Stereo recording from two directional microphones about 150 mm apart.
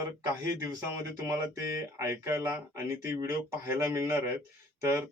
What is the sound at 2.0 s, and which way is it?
Speech, 20° right (ahead or behind).